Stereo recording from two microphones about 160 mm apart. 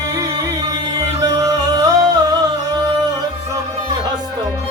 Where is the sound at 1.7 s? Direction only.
25° right (ahead or behind).